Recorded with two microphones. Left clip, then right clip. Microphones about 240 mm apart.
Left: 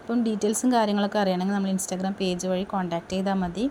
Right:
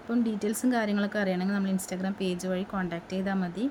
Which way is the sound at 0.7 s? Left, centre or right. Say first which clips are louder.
Left 6 dB; centre.